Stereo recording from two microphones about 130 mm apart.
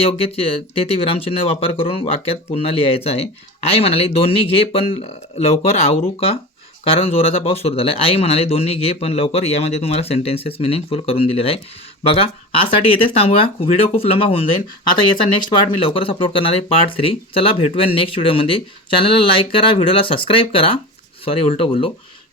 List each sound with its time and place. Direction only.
0.0 s speech: 50° left (ahead or behind)
6.1 s speech: 45° left (ahead or behind)